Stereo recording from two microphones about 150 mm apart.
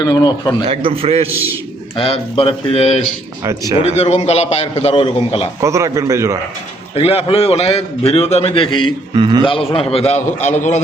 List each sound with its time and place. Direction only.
0.0 s a man's voice: 30° left (ahead or behind)
0.7 s a man's voice: 35° right (ahead or behind)
2.0 s a man's voice: 40° left (ahead or behind)
5.5 s a man's voice: 20° right (ahead or behind)
6.9 s a man's voice: 40° left (ahead or behind)
9.1 s a man's voice: 30° right (ahead or behind)
9.4 s a man's voice: 35° left (ahead or behind)